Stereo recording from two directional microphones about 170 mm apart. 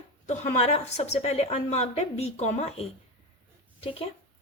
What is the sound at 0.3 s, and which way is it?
A woman's voice, 40° left (ahead or behind).